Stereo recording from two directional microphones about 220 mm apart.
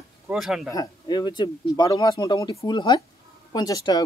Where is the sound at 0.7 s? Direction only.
20° left (ahead or behind).